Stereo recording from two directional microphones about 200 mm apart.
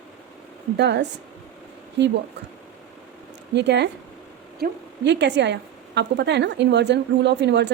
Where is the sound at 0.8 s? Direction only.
60° right (ahead or behind).